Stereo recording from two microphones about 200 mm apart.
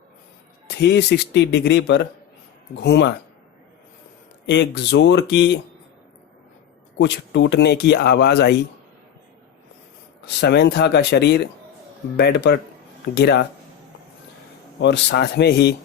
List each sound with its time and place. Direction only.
0.7 s speech: 60° left (ahead or behind)
4.4 s speech: 60° left (ahead or behind)
7.0 s speech: 60° left (ahead or behind)
10.2 s speech: 60° left (ahead or behind)
14.8 s speech: 55° left (ahead or behind)